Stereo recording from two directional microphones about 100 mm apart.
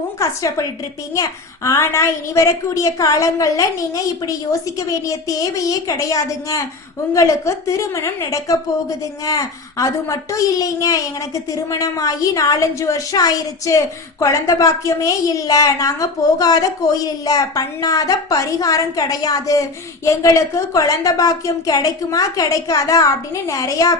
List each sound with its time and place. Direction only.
0.2 s a woman's voice: 30° left (ahead or behind)